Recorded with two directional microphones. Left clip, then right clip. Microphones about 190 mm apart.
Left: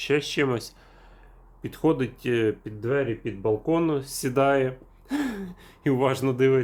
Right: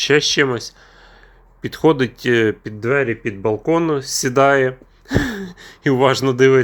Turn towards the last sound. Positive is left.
turn(degrees=-20)  # may be behind; listen again after turning